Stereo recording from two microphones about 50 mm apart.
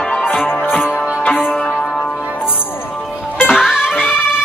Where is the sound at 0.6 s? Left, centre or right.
Centre.